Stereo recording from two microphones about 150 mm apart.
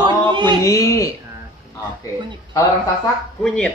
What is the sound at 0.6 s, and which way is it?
Speech, 20° left (ahead or behind).